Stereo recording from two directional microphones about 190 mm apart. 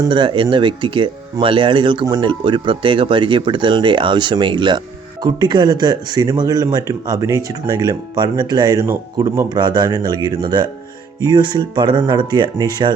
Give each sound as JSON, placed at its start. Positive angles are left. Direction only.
{"t": 0.0, "sound": "speech", "side_deg": -25}